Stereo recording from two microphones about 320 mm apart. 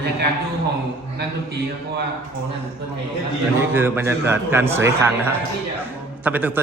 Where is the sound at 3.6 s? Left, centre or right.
Centre.